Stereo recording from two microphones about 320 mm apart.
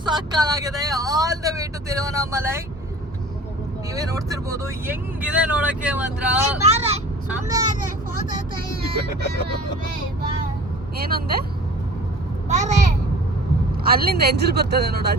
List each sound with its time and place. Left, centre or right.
0.0 s speech: centre
3.9 s speech: centre
6.7 s vehicle: centre
7.3 s speech: centre
8.7 s speech: right
11.1 s speech: right
12.5 s speech: right
13.8 s speech: right